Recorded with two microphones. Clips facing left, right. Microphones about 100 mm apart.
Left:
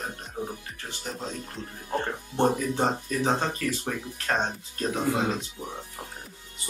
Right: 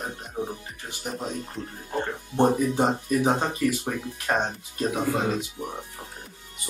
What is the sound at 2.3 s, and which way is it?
Speech, 15° right (ahead or behind).